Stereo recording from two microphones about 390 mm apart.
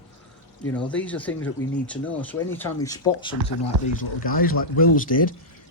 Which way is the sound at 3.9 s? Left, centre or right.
Centre.